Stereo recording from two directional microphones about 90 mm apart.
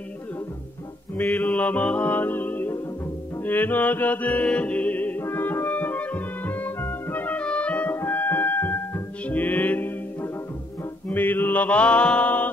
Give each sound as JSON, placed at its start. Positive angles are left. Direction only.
{"t": 1.4, "sound": "music", "side_deg": 15}
{"t": 11.1, "sound": "mantra", "side_deg": 20}